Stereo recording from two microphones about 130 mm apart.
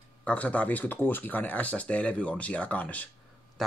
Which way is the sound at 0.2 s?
10° left (ahead or behind).